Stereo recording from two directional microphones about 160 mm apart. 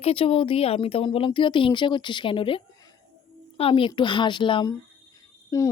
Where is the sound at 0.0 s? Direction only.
35° left (ahead or behind).